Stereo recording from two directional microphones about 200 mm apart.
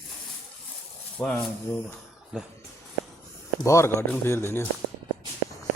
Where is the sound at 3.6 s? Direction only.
15° left (ahead or behind).